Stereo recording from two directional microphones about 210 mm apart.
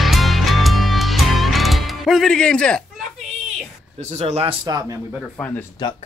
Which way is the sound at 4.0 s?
30° right (ahead or behind).